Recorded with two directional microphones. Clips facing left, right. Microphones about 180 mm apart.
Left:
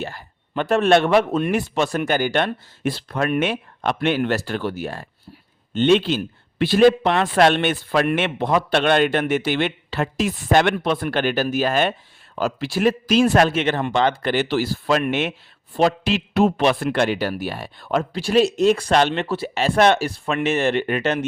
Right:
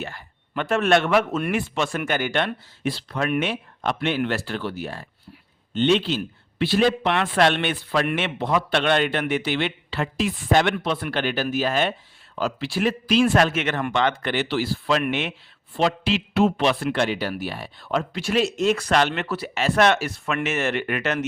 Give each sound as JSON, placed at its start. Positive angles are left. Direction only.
{"t": 0.0, "sound": "a man's voice", "side_deg": 35}
{"t": 18.1, "sound": "a man's voice", "side_deg": 35}